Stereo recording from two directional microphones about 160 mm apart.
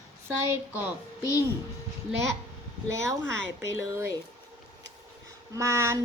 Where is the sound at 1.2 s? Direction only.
20° left (ahead or behind).